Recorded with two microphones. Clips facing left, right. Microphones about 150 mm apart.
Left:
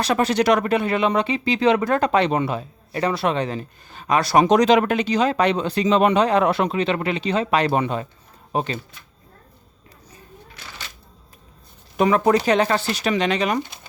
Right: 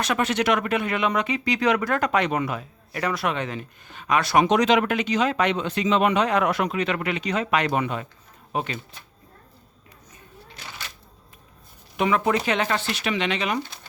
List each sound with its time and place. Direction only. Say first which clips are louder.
0.0 s speech: left 4 dB; 35° left (ahead or behind)
11.9 s speech: left 5 dB; 40° left (ahead or behind)